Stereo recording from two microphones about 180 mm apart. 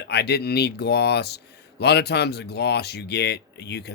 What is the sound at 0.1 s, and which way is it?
Speech, 65° left (ahead or behind).